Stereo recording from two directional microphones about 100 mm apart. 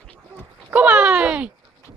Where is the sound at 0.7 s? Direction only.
10° right (ahead or behind).